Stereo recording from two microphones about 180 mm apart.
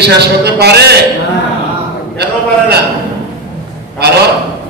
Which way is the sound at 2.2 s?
65° right (ahead or behind).